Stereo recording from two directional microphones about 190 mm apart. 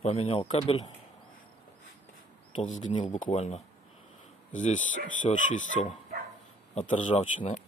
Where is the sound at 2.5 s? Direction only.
40° left (ahead or behind).